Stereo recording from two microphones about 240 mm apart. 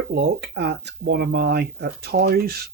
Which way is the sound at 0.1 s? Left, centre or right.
Right.